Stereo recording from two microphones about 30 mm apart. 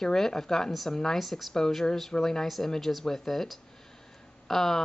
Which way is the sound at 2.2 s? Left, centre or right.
Centre.